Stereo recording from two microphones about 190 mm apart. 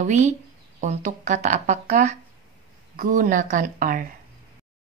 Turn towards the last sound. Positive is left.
turn(degrees=-45)  # may be behind; listen again after turning